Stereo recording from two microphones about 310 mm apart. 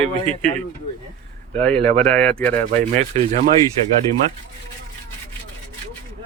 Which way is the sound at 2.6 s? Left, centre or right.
Right.